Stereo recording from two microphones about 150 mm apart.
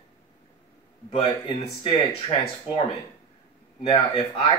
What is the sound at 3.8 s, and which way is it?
Speech, 35° left (ahead or behind).